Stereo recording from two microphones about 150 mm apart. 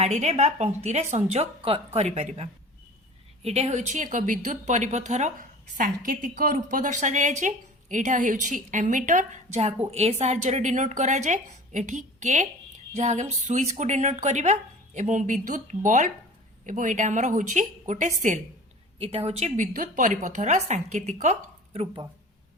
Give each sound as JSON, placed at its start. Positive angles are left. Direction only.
{"t": 0.0, "sound": "a woman's voice", "side_deg": -50}
{"t": 3.4, "sound": "a woman's voice", "side_deg": -45}
{"t": 18.9, "sound": "a woman's voice", "side_deg": -40}